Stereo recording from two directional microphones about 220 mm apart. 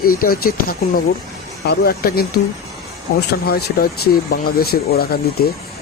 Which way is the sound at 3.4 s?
45° left (ahead or behind).